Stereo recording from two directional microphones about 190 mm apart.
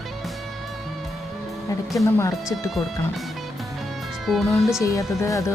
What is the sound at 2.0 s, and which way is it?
Speech, 15° left (ahead or behind).